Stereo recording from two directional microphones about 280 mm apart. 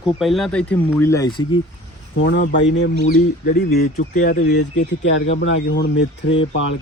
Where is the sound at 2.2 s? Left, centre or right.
Left.